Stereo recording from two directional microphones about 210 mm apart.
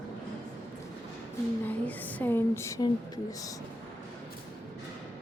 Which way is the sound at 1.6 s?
10° left (ahead or behind).